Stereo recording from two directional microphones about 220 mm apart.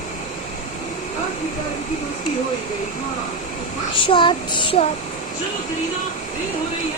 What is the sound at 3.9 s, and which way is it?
Child singing, 25° left (ahead or behind).